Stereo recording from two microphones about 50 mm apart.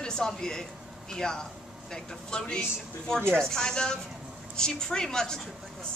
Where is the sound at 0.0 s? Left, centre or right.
Centre.